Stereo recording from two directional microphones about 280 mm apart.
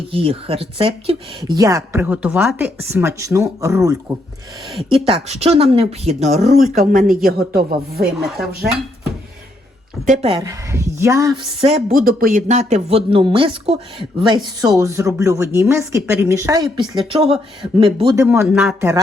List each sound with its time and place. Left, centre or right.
0.1 s a woman's voice: centre
10.1 s a woman's voice: right; by 18.9 s centre